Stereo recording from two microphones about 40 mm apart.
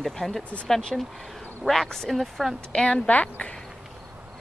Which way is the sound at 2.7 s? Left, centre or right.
Left.